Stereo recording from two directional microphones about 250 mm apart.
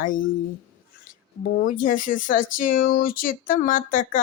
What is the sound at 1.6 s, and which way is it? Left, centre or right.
Speech, left.